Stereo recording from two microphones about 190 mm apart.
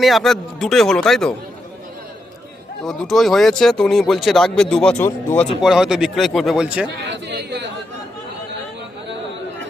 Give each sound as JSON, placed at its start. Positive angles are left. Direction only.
{"t": 0.0, "sound": "speech", "side_deg": 0}
{"t": 2.8, "sound": "speech", "side_deg": 0}
{"t": 5.6, "sound": "speech", "side_deg": -5}
{"t": 7.0, "sound": "a sound", "side_deg": -65}